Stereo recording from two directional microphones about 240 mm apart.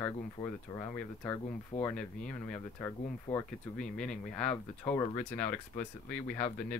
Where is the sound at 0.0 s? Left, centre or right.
Centre.